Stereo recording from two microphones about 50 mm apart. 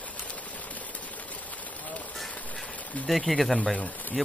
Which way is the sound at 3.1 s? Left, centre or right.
Centre.